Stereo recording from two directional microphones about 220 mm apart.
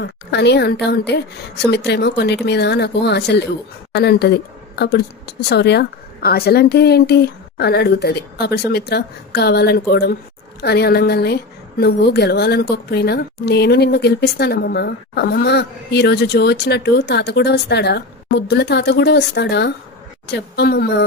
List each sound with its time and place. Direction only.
0.0 s a woman's voice: 50° left (ahead or behind)